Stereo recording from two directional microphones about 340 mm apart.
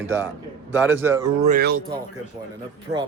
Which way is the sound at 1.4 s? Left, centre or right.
Right.